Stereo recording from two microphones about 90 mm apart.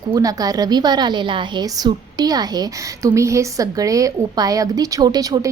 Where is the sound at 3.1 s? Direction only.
35° right (ahead or behind).